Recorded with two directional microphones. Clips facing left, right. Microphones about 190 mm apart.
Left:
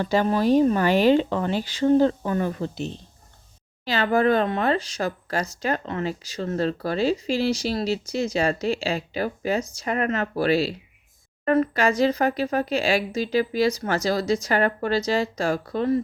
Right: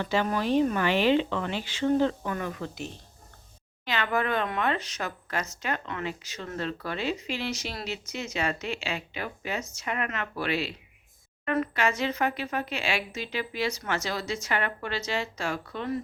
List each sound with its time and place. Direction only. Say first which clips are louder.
0.0 s speech: left 6 dB; 40° left (ahead or behind)